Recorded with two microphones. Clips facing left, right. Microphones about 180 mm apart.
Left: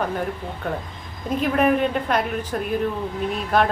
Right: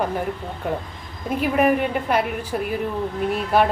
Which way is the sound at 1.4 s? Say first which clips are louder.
Even; 10° right (ahead or behind).